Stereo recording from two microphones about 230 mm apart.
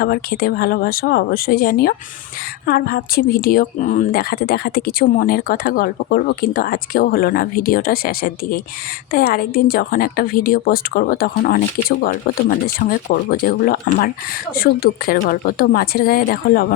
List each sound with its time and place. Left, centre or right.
0.0 s a woman's voice: left